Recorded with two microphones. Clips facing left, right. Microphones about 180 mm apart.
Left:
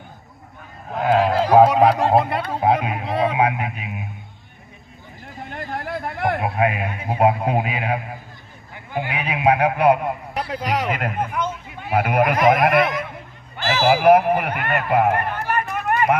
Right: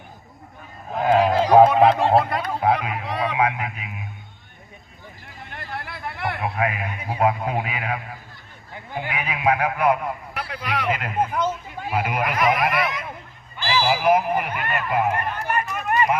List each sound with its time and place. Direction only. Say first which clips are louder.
0.9 s a sound: even; centre (ahead or behind)
1.4 s speech: even; 5° left (ahead or behind); by 2.7 s 30° left (ahead or behind)
2.8 s honk: left 4 dB; 30° left (ahead or behind)
5.5 s a sound: left 6 dB; 45° left (ahead or behind)
6.6 s a man's voice: left 4 dB; 30° left (ahead or behind)
9.1 s a man's voice: left 3 dB; 30° left (ahead or behind); by 16.1 s 55° left (ahead or behind)